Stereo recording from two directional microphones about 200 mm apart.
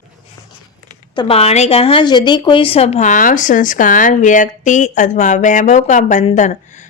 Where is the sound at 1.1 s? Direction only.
25° left (ahead or behind).